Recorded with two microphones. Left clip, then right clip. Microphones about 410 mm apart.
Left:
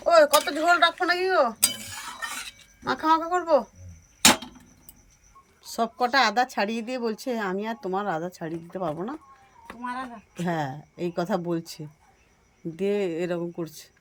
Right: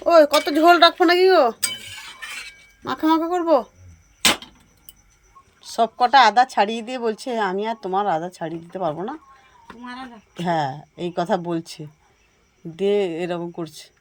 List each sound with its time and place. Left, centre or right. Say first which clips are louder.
0.1 s speech: right 4 dB; centre
2.8 s speech: right 2 dB; centre
5.7 s speech: right 8 dB; centre
8.7 s speech: right 5 dB; right
10.9 s speech: right 4 dB; centre